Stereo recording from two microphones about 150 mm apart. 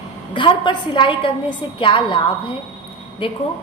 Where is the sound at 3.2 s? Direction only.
35° left (ahead or behind).